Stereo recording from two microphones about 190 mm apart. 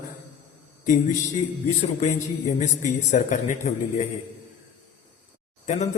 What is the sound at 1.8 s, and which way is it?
A man's voice, 35° left (ahead or behind).